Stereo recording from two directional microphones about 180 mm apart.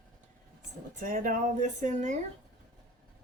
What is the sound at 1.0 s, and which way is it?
Speech, 50° right (ahead or behind).